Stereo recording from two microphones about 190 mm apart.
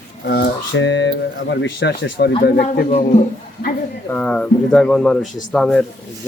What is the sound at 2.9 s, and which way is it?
Speech, 40° left (ahead or behind).